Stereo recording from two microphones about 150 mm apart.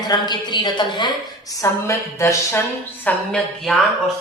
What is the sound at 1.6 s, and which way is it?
A woman's voice, 20° left (ahead or behind).